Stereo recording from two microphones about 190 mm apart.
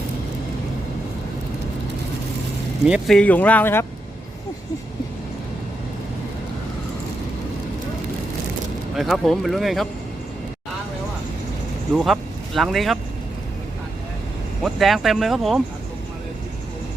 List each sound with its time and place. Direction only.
2.8 s speech: centre (ahead or behind)
9.0 s speech: centre (ahead or behind)
11.9 s speech: centre (ahead or behind)
14.6 s speech: centre (ahead or behind)